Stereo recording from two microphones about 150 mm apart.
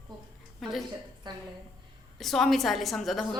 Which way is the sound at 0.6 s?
Centre (ahead or behind).